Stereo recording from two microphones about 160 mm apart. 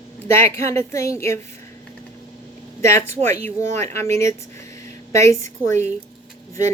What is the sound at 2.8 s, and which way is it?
A woman's voice, 15° left (ahead or behind).